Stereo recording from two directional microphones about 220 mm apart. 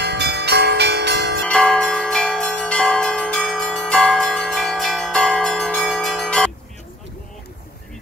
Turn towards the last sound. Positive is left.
turn(degrees=5)  # may be behind; listen again after turning